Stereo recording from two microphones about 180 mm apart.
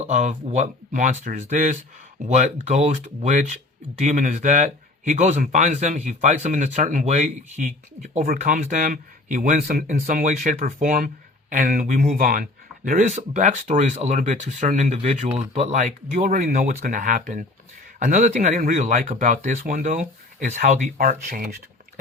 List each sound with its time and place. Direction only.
0.0 s speech: 40° right (ahead or behind)